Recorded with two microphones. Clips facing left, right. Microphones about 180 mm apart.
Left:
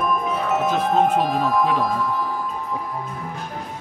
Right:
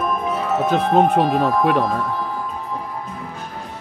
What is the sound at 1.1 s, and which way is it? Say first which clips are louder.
Speech: right 3 dB; 60° right (ahead or behind).